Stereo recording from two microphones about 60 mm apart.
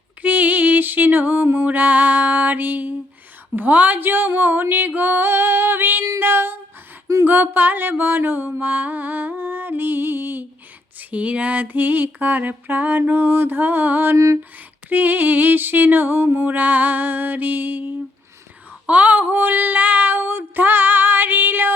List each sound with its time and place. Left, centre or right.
0.2 s music: right
3.5 s mantra: right
4.4 s music: right
6.1 s female singing: right
7.3 s mantra: right
11.1 s mantra: right
18.9 s mantra: right